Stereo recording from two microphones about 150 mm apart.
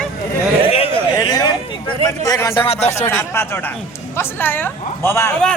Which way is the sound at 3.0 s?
15° left (ahead or behind).